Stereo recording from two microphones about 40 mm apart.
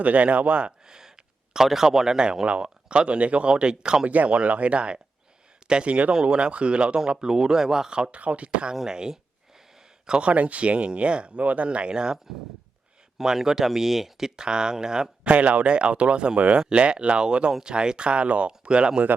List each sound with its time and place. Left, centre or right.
0.0 s speech: right
0.9 s a sound: centre
1.5 s speech: centre; by 3.5 s right
3.5 s speech: right
4.0 s speech: right
8.2 s speech: right
8.9 s speech: centre
10.1 s speech: right
15.3 s speech: right